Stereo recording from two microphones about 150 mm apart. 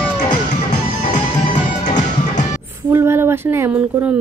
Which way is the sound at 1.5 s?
55° left (ahead or behind).